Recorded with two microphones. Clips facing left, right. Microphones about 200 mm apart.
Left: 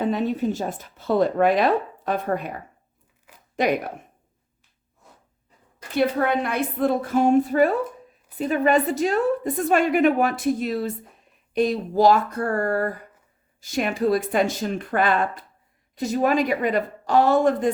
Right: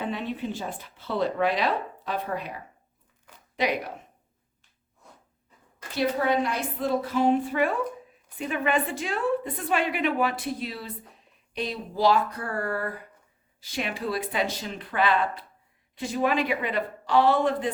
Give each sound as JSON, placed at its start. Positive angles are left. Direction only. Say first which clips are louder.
{"t": 0.0, "sound": "a woman's voice", "louder": "left 8 dB", "side_deg": 40}
{"t": 6.0, "sound": "a woman's voice", "louder": "left 3 dB", "side_deg": 55}